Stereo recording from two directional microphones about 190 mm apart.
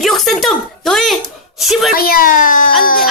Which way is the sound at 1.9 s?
50° left (ahead or behind).